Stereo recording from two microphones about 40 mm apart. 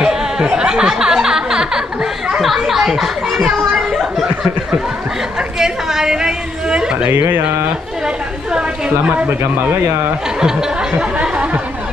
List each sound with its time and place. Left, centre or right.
0.0 s a child's voice: centre
5.6 s a sound: centre
7.1 s speech: right
11.1 s speech: right